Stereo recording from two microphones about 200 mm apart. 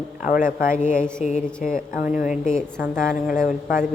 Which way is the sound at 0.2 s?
40° left (ahead or behind).